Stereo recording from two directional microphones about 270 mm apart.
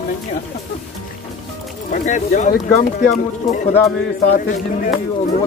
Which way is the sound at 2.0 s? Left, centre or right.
Left.